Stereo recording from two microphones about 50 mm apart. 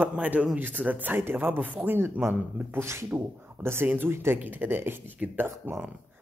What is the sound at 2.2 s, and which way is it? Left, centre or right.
Speech, right.